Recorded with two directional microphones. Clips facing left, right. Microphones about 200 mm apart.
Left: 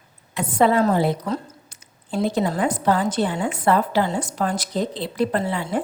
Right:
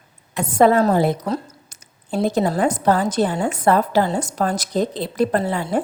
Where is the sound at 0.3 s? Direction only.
45° right (ahead or behind).